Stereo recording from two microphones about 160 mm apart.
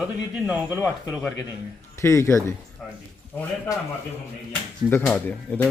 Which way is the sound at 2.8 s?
Centre (ahead or behind).